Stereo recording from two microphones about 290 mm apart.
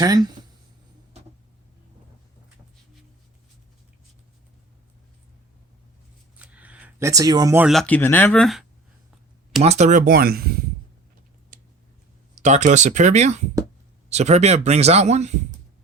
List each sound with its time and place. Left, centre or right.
0.0 s speech: centre
6.4 s speech: centre
9.6 s speech: right
12.3 s speech: right